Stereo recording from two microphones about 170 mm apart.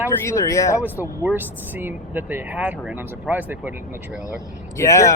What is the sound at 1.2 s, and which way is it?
Speech, 10° right (ahead or behind).